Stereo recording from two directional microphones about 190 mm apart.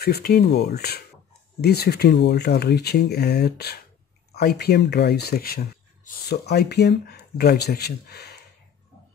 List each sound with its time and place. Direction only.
0.0 s speech: 55° left (ahead or behind)